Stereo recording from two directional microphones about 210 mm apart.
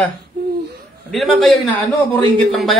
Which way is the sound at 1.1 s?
Centre (ahead or behind).